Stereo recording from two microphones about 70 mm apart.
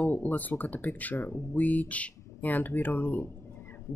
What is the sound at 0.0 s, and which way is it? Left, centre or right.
Speech, left.